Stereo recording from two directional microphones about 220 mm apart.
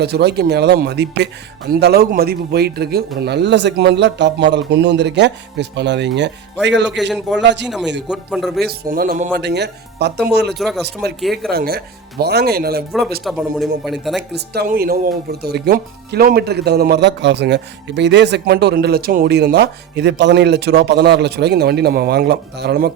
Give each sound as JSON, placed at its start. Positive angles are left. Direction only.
{"t": 0.0, "sound": "speech", "side_deg": -50}
{"t": 8.0, "sound": "speech", "side_deg": -5}
{"t": 8.6, "sound": "speech", "side_deg": -40}
{"t": 9.4, "sound": "speech", "side_deg": -50}
{"t": 10.6, "sound": "speech", "side_deg": 0}
{"t": 11.5, "sound": "speech", "side_deg": -45}
{"t": 13.2, "sound": "speech", "side_deg": 0}
{"t": 14.2, "sound": "speech", "side_deg": -50}